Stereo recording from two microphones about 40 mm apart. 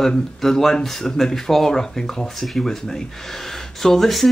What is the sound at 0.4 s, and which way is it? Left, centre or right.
Speech, centre.